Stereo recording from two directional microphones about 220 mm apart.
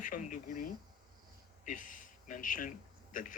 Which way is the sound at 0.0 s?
35° left (ahead or behind).